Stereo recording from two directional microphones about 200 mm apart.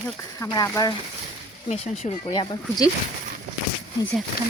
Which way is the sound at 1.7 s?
35° left (ahead or behind).